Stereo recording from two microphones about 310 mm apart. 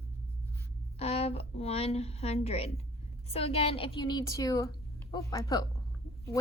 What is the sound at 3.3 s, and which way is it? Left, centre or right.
A woman's voice, centre.